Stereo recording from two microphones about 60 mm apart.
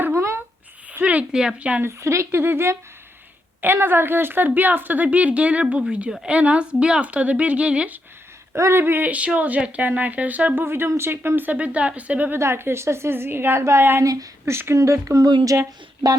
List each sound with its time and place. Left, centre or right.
0.1 s a sound: right
1.0 s a sound: right
1.4 s speech: centre
1.8 s a woman's voice: right
2.4 s a woman's voice: right; by 5.8 s centre
6.1 s speech: centre
6.3 s speech: right
8.5 s speech: right
8.8 s speech: right
12.3 s a woman's voice: right
14.0 s speech: right
14.4 s a woman's voice: right
14.8 s speech: right
15.1 s speech: right